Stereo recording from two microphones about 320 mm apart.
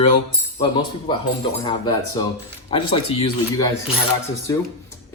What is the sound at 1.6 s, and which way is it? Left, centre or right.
Speech, centre.